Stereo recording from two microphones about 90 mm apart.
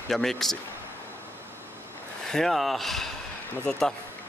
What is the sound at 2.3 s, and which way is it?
Speech, 5° left (ahead or behind).